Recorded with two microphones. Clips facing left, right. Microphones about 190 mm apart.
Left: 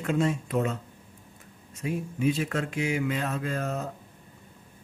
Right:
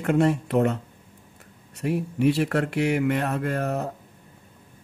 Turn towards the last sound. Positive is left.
turn(degrees=-65)  # may be behind; listen again after turning